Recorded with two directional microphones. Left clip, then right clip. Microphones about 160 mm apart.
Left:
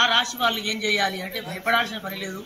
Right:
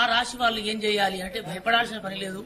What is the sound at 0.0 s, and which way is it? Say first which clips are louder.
A man's voice: left 3 dB; 30° right (ahead or behind).